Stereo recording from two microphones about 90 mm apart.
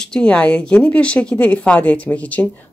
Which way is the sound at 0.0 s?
10° left (ahead or behind).